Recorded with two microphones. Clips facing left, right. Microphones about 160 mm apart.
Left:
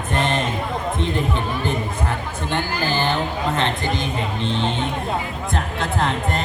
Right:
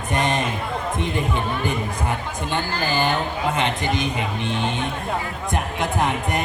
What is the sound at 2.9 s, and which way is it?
Speech, 15° right (ahead or behind).